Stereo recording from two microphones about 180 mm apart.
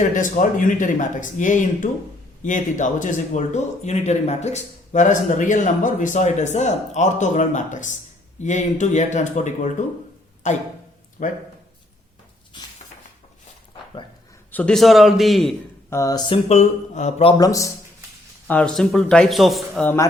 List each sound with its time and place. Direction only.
0.0 s speech: 45° left (ahead or behind)
14.5 s a man's voice: 5° left (ahead or behind)
15.9 s speech: 15° left (ahead or behind)
16.5 s speech: 40° left (ahead or behind)
17.3 s speech: 20° left (ahead or behind)
18.4 s a man's voice: 5° left (ahead or behind)